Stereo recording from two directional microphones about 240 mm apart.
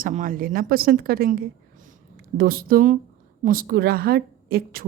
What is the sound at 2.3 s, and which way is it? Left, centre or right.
A woman's voice, right.